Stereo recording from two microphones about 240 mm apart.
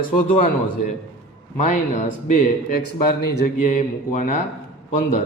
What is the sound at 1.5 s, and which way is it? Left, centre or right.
Speech, left.